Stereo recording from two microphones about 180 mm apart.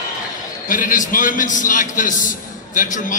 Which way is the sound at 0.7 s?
50° left (ahead or behind).